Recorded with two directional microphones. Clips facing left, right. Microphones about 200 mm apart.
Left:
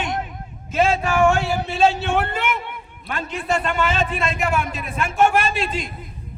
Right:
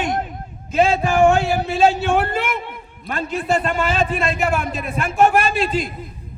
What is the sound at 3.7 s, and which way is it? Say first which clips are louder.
A man's voice: right 2 dB; 35° right (ahead or behind).